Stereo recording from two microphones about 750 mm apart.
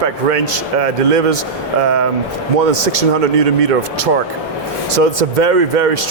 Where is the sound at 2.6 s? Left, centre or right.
Right.